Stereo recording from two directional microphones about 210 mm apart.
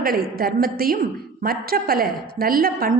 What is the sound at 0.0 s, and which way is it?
A woman's voice, 45° right (ahead or behind).